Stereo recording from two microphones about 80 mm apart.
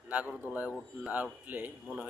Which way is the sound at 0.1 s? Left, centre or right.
Centre.